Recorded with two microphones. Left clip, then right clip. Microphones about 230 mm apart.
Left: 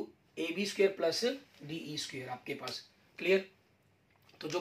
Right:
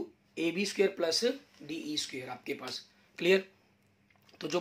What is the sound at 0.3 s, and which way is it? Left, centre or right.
Speech, right.